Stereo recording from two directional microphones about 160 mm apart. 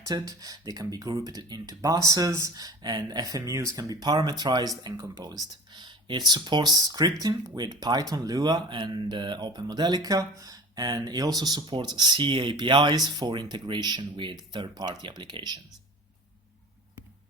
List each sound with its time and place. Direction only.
0.0 s speech: 20° right (ahead or behind)